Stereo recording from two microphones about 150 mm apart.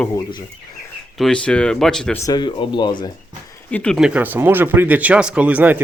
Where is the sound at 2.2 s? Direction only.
30° left (ahead or behind).